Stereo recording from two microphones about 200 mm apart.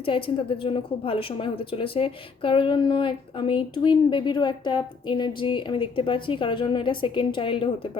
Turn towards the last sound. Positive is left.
turn(degrees=25)  # may be behind; listen again after turning